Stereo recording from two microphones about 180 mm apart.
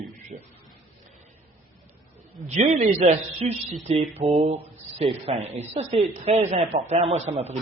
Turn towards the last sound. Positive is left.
turn(degrees=-35)  # may be behind; listen again after turning